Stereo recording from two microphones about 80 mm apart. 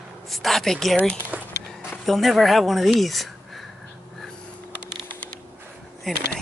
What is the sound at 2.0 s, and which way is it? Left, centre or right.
Speech, centre.